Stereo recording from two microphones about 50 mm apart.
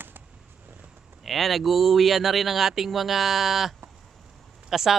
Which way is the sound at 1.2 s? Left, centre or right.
Centre.